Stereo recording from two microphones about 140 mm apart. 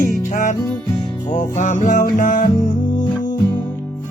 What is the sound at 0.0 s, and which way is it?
Music, 65° left (ahead or behind).